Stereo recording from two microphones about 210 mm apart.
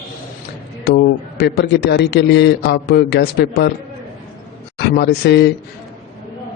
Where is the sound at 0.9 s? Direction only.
55° left (ahead or behind).